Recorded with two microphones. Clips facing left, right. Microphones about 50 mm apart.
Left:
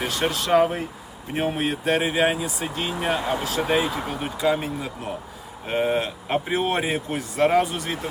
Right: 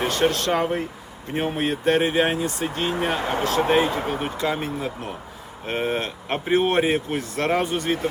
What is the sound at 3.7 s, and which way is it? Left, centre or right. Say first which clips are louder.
Speech: right 1 dB; centre.